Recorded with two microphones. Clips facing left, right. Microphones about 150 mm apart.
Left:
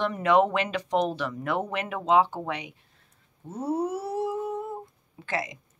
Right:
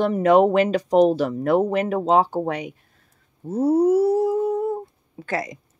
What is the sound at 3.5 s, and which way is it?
Humming, 40° right (ahead or behind).